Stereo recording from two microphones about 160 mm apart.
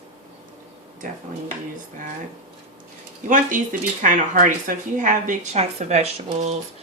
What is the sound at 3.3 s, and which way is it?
Speech, 55° right (ahead or behind).